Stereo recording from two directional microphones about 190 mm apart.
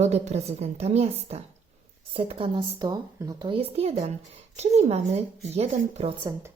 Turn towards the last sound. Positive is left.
turn(degrees=-20)  # may be behind; listen again after turning